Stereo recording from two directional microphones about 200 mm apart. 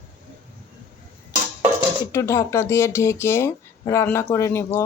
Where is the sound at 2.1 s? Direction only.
15° left (ahead or behind).